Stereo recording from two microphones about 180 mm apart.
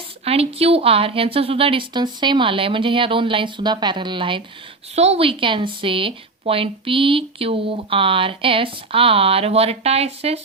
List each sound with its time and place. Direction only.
0.3 s a woman's voice: 35° right (ahead or behind)